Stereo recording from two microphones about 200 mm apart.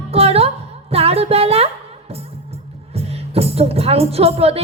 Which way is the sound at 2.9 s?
30° right (ahead or behind).